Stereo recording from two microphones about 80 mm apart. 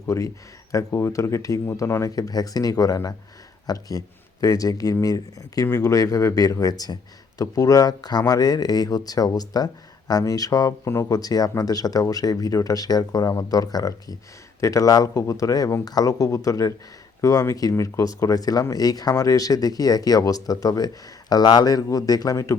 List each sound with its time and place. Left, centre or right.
0.1 s speech: left
10.7 s speech: left
11.2 s speech: left